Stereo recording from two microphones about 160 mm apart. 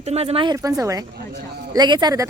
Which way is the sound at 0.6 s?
20° right (ahead or behind).